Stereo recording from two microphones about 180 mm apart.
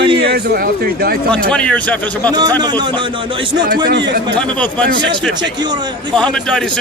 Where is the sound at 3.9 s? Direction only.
80° right.